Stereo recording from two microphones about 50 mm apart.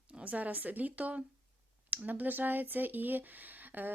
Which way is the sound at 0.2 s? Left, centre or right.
Right.